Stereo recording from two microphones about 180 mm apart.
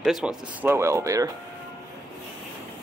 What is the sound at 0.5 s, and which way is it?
Speech, 10° right (ahead or behind).